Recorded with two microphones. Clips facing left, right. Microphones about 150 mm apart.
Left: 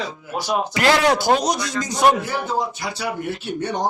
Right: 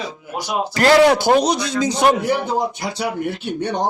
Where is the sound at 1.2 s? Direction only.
65° right (ahead or behind).